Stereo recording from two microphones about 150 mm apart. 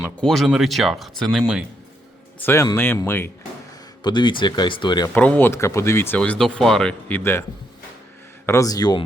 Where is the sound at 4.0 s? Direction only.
30° left (ahead or behind).